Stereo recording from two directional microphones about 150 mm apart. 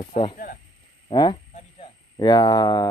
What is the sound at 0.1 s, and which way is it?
Speech, 35° left (ahead or behind).